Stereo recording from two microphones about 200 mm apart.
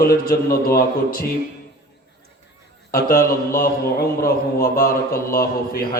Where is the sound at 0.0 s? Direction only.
50° left (ahead or behind).